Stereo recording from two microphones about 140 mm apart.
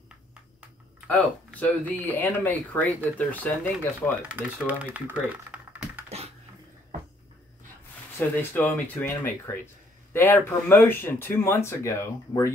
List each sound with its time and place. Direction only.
1.0 s speech: 10° left (ahead or behind)
4.2 s speech: 10° right (ahead or behind)
4.9 s typing: 10° right (ahead or behind)
6.0 s a sound: 50° right (ahead or behind)
8.2 s speech: 15° left (ahead or behind)